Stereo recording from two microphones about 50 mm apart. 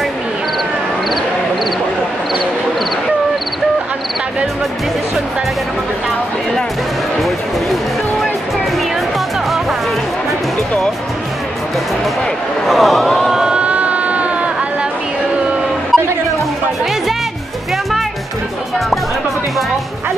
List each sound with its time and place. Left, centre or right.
12.6 s a sound: centre
13.5 s sheep: right
15.9 s music: centre